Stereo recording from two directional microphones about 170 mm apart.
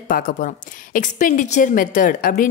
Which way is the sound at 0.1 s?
55° left (ahead or behind).